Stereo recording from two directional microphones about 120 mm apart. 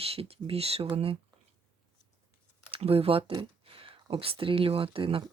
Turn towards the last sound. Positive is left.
turn(degrees=-45)  # may be behind; listen again after turning